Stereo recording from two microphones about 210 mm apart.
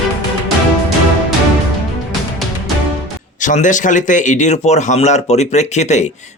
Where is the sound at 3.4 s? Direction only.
35° left (ahead or behind).